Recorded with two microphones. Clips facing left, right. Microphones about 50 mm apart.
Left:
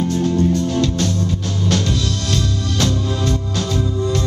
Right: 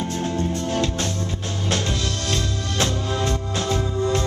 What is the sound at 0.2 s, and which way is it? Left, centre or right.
Music, right.